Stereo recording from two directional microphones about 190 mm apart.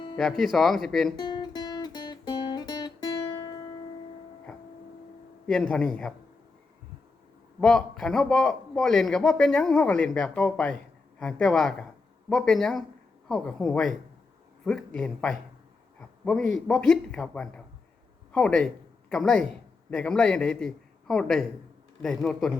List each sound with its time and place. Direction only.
0.2 s a man's voice: centre (ahead or behind)
1.1 s guitar: 20° left (ahead or behind)
5.5 s a man's voice: 5° left (ahead or behind)
7.6 s a man's voice: 5° left (ahead or behind)